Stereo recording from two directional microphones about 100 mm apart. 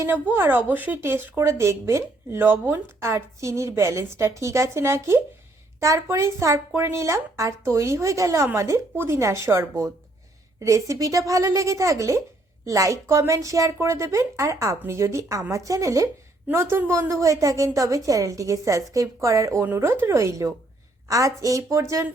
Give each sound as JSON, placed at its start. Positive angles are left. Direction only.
{"t": 0.1, "sound": "a woman's voice", "side_deg": -20}